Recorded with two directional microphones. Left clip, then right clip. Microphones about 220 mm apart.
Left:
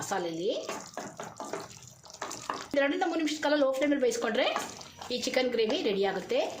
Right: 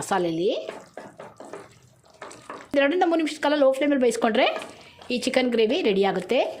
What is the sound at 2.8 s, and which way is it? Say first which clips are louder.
A woman's voice: right 8 dB; 35° right (ahead or behind).